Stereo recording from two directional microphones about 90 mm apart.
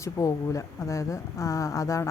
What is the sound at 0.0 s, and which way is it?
Speech, 35° left (ahead or behind).